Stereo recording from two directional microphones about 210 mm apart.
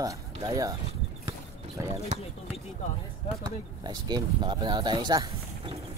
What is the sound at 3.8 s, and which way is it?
Speech, 20° right (ahead or behind).